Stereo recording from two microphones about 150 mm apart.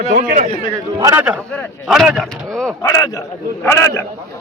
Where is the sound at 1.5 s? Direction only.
10° left (ahead or behind).